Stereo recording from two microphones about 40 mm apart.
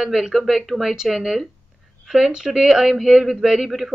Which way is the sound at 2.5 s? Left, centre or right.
Centre.